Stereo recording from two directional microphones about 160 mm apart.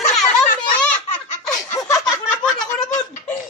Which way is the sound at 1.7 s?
15° left (ahead or behind).